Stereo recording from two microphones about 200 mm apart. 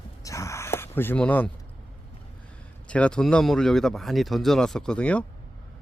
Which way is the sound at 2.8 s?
5° left (ahead or behind).